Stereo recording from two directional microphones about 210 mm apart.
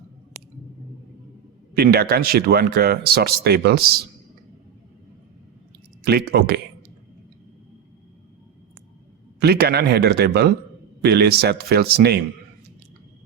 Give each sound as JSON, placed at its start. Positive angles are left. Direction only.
{"t": 1.7, "sound": "speech", "side_deg": -45}
{"t": 6.1, "sound": "speech", "side_deg": -50}
{"t": 9.4, "sound": "speech", "side_deg": -50}